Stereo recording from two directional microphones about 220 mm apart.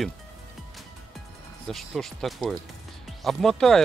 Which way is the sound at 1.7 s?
Centre (ahead or behind).